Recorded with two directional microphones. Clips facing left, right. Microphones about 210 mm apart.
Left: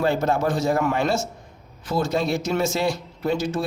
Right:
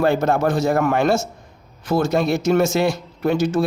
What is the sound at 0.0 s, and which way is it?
Speech, 65° right (ahead or behind).